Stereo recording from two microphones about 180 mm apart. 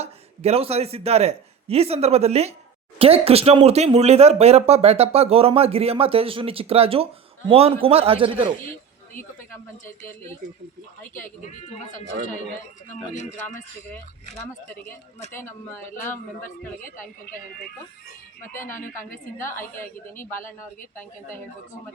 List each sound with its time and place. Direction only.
0.0 s a man's voice: 35° right (ahead or behind)
13.1 s speech: 40° left (ahead or behind)
15.3 s a woman's voice: 10° left (ahead or behind)
18.7 s a woman's voice: 15° left (ahead or behind)